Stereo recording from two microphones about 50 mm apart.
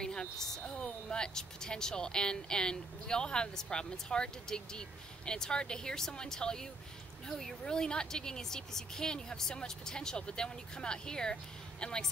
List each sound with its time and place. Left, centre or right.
0.0 s a woman's voice: centre